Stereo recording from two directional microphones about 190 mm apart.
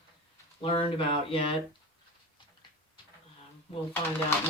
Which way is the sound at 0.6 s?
30° left (ahead or behind).